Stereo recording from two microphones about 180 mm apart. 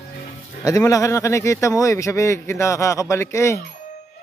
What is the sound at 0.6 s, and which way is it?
Speech, 20° left (ahead or behind).